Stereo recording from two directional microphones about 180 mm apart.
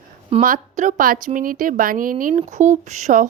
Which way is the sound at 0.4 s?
45° right (ahead or behind).